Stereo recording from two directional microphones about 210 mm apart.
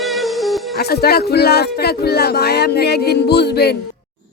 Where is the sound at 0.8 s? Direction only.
50° left (ahead or behind).